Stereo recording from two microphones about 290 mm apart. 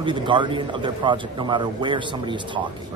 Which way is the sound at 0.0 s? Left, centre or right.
Centre.